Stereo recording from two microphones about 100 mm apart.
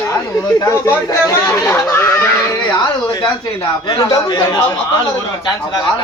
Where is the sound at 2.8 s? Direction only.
35° left (ahead or behind).